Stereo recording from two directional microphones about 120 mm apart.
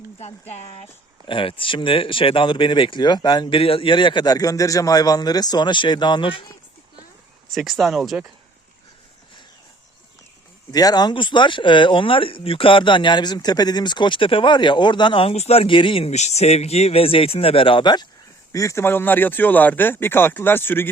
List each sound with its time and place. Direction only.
1.3 s speech: 45° left (ahead or behind)
3.6 s a man's voice: 50° left (ahead or behind)
7.5 s speech: centre (ahead or behind)
10.7 s speech: 30° left (ahead or behind); by 16.1 s 50° left (ahead or behind)
16.1 s speech: 70° left (ahead or behind); by 18.1 s 40° left (ahead or behind)
18.5 s speech: 25° left (ahead or behind)